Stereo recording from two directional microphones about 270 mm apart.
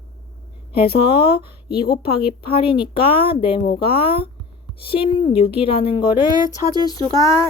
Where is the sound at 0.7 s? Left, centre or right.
Centre.